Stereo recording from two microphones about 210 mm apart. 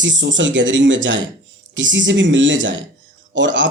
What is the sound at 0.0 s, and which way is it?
Speech, 60° right (ahead or behind).